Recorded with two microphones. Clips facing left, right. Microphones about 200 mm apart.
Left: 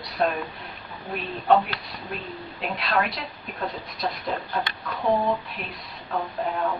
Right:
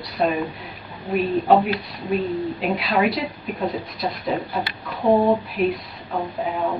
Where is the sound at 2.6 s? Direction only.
Centre (ahead or behind).